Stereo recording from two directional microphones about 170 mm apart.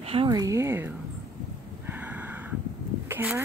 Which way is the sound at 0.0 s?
35° right (ahead or behind).